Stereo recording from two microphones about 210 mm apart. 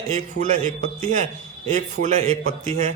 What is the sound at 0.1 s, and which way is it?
A man's voice, 35° right (ahead or behind).